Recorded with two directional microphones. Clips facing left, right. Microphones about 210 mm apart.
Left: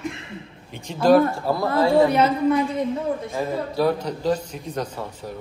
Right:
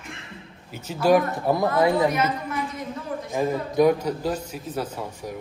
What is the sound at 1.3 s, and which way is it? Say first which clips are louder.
Speech: right 1 dB; 20° right (ahead or behind).